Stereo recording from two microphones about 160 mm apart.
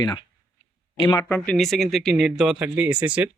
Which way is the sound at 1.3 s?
5° left (ahead or behind).